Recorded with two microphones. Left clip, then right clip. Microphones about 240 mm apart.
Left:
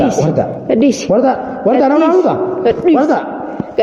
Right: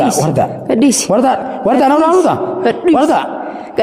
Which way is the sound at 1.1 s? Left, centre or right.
Right.